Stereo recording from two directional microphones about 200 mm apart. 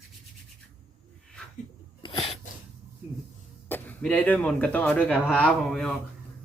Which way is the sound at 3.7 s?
10° left (ahead or behind).